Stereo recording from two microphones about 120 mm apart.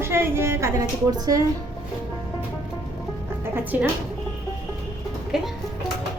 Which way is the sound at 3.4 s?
15° right (ahead or behind).